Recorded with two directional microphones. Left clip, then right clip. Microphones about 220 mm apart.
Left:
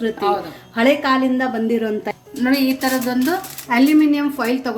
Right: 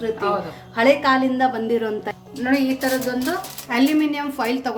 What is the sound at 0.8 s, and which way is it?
A woman's voice, 5° left (ahead or behind).